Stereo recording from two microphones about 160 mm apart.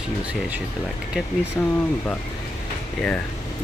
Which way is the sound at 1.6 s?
10° left (ahead or behind).